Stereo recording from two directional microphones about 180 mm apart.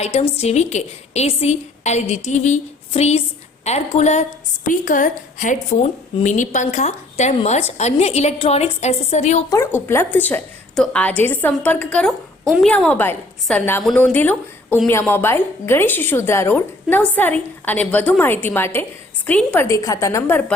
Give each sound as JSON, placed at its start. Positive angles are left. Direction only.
{"t": 0.0, "sound": "a woman's voice", "side_deg": 35}
{"t": 9.5, "sound": "a woman's voice", "side_deg": 15}